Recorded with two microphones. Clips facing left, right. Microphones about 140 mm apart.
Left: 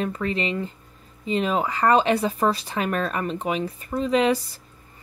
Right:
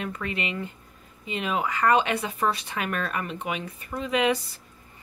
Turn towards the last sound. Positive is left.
turn(degrees=35)  # may be behind; listen again after turning